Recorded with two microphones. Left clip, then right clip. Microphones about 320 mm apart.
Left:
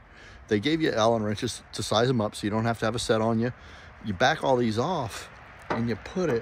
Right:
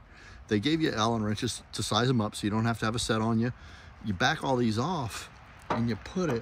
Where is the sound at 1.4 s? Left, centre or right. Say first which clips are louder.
Left 2 dB; centre.